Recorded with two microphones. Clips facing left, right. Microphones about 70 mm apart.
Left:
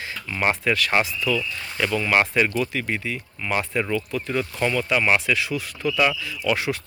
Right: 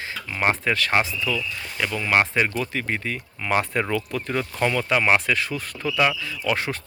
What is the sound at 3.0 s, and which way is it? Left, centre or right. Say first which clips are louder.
Speech: right 1 dB; right.